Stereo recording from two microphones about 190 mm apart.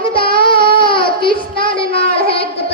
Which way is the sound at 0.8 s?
25° left (ahead or behind).